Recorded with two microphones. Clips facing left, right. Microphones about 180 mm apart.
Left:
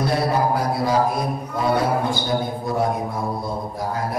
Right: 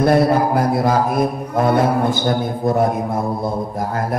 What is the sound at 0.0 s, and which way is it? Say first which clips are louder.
A man's voice: right 6 dB; 55° right (ahead or behind).